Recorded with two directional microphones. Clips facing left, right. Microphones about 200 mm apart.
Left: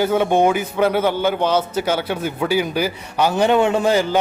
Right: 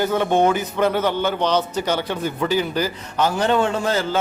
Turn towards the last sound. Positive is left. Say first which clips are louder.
# left 4 dB
turn(degrees=15)  # may be behind; listen again after turning